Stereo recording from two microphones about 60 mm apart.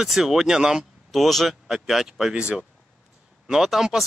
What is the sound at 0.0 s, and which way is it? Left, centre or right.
Speech, centre.